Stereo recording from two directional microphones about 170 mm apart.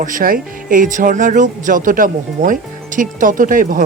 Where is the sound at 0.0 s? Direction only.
55° right (ahead or behind).